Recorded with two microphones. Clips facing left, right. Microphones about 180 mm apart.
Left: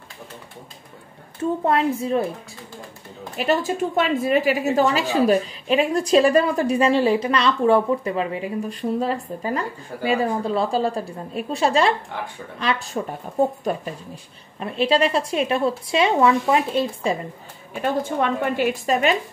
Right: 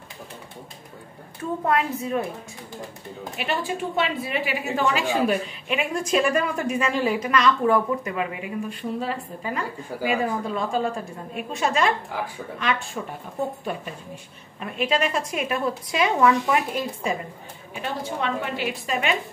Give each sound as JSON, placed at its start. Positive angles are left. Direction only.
{"t": 1.4, "sound": "a woman's voice", "side_deg": 30}
{"t": 3.3, "sound": "a woman's voice", "side_deg": 40}
{"t": 18.0, "sound": "a woman's voice", "side_deg": 50}